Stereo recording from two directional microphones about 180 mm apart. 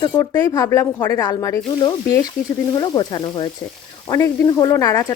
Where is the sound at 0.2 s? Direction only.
20° left (ahead or behind).